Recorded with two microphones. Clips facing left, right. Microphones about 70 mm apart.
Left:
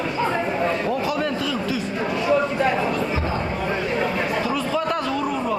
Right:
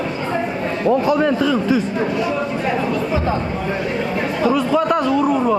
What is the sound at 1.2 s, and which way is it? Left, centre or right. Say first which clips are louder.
Speech: right 7 dB; right.